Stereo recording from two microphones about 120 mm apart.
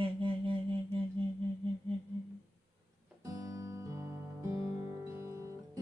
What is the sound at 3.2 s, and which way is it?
Music, 30° right (ahead or behind).